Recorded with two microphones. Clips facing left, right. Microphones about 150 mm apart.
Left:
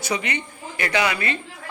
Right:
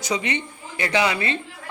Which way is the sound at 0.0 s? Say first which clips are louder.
Right 1 dB; 20° right (ahead or behind).